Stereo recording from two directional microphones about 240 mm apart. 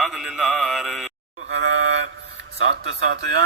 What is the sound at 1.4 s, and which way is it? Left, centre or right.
A man's voice, right.